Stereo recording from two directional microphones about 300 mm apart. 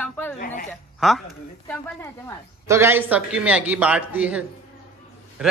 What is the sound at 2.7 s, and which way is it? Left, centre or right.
Speech, centre.